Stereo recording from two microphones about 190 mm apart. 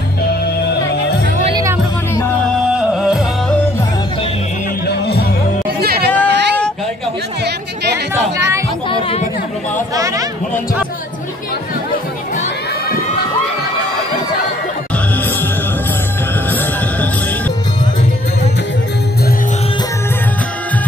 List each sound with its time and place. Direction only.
2.7 s music: 5° right (ahead or behind)
5.8 s chatter: 55° right (ahead or behind)
8.1 s a sound: 15° right (ahead or behind)
8.8 s chatter: 30° left (ahead or behind)
9.9 s a sound: 15° right (ahead or behind)
16.4 s music: 10° left (ahead or behind)